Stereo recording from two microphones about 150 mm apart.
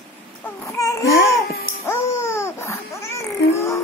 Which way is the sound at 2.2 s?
15° left (ahead or behind).